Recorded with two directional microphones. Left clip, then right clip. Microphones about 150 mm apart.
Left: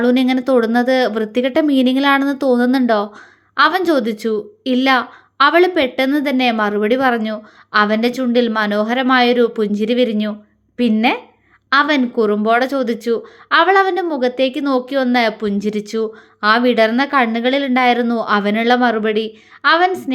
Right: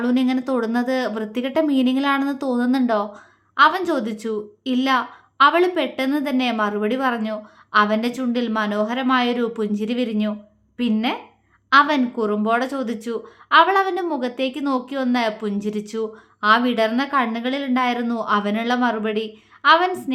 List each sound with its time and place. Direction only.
0.0 s speech: 30° left (ahead or behind)